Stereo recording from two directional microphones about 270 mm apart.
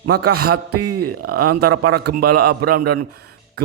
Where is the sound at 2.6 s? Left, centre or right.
Right.